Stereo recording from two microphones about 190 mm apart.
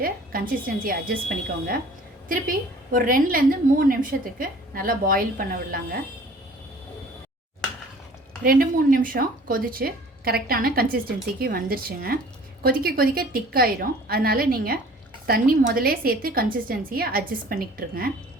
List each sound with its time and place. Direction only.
0.0 s a woman's voice: 50° right (ahead or behind)
2.3 s a woman's voice: 50° right (ahead or behind)
8.4 s a woman's voice: 50° right (ahead or behind)